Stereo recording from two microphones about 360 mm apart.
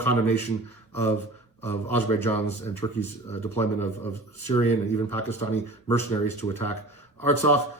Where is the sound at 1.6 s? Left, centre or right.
Centre.